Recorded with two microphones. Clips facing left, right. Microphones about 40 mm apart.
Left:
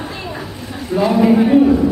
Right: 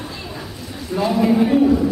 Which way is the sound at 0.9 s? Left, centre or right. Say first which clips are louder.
Left 4 dB; centre.